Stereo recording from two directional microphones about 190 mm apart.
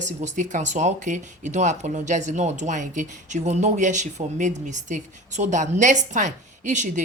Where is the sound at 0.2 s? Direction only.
40° right (ahead or behind).